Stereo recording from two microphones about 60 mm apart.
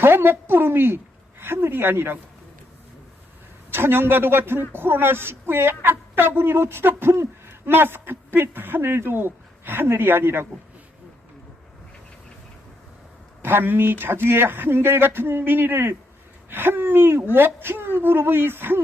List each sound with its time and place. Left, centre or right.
0.0 s a woman's voice: right
3.7 s a woman's voice: right
13.4 s a woman's voice: right